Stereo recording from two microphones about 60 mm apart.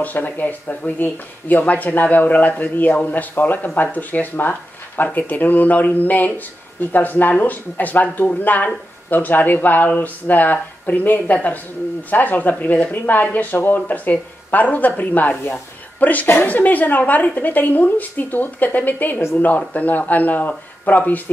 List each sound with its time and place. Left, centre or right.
0.0 s a man's voice: left